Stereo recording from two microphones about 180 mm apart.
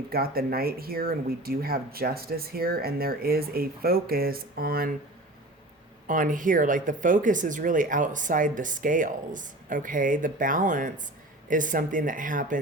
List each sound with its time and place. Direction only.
0.1 s speech: 55° right (ahead or behind)
6.1 s speech: 50° right (ahead or behind)